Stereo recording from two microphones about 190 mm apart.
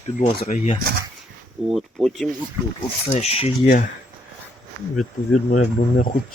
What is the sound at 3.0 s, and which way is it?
Speech, 35° left (ahead or behind).